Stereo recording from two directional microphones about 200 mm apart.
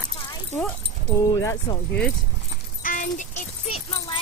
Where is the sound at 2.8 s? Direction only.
40° left (ahead or behind).